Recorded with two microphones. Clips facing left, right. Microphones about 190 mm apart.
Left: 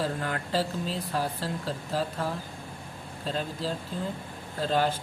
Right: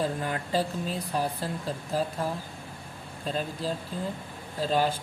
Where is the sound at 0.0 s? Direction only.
15° right (ahead or behind).